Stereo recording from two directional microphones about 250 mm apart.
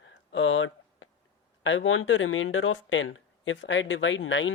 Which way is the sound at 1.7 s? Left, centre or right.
Left.